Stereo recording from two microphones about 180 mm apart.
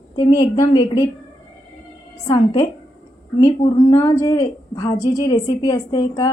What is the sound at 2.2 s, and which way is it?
A woman's voice, 20° left (ahead or behind).